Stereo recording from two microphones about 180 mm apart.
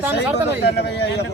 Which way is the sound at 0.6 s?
65° left (ahead or behind).